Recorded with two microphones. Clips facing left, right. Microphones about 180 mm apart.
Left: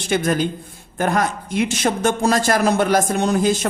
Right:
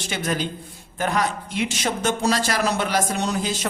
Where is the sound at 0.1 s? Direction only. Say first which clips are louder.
Left 7 dB; 50° left (ahead or behind).